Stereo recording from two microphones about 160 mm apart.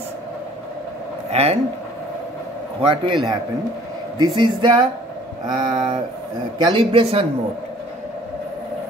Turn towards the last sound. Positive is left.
turn(degrees=-35)  # may be behind; listen again after turning